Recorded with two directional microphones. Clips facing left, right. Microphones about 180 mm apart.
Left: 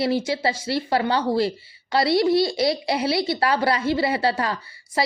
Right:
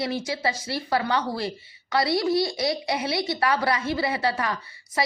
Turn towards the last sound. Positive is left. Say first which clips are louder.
# left 3 dB
turn(degrees=30)  # may be behind; listen again after turning